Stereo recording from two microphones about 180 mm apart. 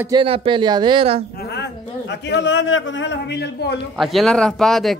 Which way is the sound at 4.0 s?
Centre (ahead or behind).